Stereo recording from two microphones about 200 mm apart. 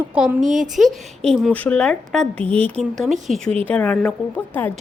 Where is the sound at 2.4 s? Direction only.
30° right (ahead or behind).